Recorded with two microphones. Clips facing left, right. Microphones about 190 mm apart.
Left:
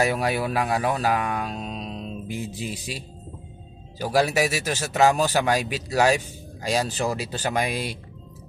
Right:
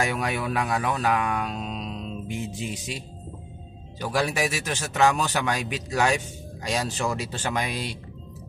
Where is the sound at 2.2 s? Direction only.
Centre (ahead or behind).